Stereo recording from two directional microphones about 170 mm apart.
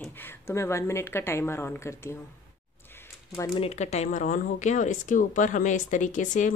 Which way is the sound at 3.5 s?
35° left (ahead or behind).